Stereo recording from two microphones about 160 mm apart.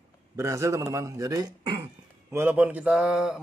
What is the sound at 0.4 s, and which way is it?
A man's voice, 20° right (ahead or behind).